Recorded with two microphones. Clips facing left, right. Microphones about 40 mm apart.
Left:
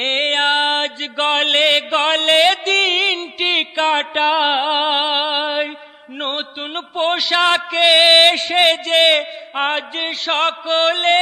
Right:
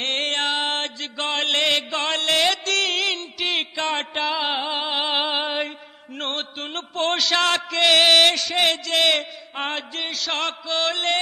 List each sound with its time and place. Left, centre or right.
0.0 s mantra: left
5.1 s mantra: centre
6.2 s chant: left